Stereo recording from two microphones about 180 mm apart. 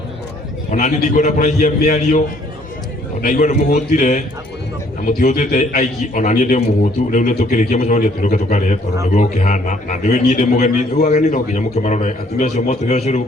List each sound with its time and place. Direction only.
0.7 s a man's voice: 40° left (ahead or behind)